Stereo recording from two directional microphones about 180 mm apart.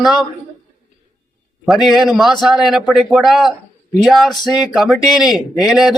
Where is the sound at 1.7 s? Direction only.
Centre (ahead or behind).